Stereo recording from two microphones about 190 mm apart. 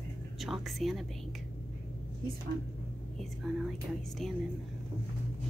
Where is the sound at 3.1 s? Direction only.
Centre (ahead or behind).